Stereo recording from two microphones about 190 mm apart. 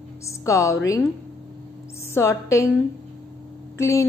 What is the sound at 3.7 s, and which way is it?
Speech, 15° left (ahead or behind).